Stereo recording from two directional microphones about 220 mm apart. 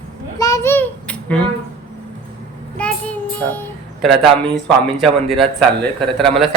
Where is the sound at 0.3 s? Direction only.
15° left (ahead or behind).